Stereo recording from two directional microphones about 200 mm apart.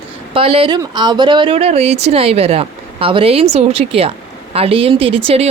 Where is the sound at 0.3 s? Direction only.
30° right (ahead or behind).